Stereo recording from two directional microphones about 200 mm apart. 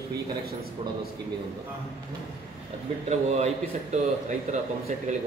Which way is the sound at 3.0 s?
35° right (ahead or behind).